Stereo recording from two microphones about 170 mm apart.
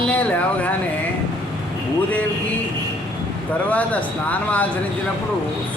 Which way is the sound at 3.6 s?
10° left (ahead or behind).